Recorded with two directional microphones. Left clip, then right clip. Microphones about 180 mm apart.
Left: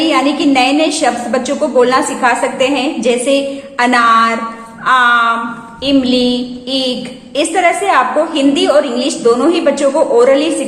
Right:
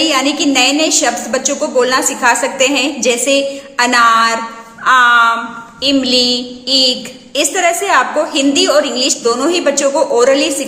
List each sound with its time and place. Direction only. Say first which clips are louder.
0.0 s a woman's voice: left 1 dB; 15° right (ahead or behind)